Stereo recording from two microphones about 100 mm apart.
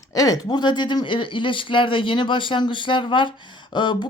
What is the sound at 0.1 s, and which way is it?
Speech, 35° left (ahead or behind).